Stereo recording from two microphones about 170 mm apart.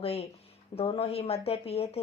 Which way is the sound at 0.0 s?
35° left (ahead or behind).